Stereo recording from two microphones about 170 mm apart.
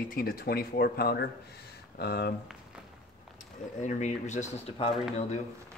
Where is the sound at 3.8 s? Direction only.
45° left (ahead or behind).